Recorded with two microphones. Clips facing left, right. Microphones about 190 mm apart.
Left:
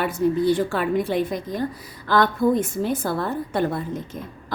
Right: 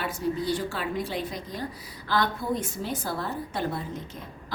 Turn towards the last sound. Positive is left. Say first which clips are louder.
# left 7 dB
turn(degrees=55)  # may be behind; listen again after turning